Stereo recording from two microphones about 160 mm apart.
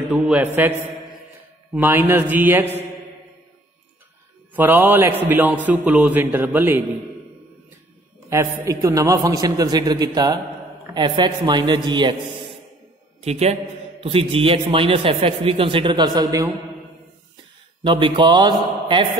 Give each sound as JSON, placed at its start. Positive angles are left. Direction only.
{"t": 0.1, "sound": "a man's voice", "side_deg": -10}
{"t": 4.6, "sound": "a man's voice", "side_deg": -15}
{"t": 8.3, "sound": "a man's voice", "side_deg": -20}
{"t": 13.2, "sound": "a man's voice", "side_deg": -40}
{"t": 17.8, "sound": "a man's voice", "side_deg": -30}